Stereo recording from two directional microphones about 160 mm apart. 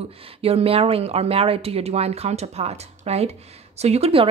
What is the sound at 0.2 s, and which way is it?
Speech, 40° right (ahead or behind).